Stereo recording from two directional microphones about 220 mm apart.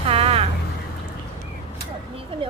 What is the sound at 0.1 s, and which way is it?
Vehicle, 25° right (ahead or behind).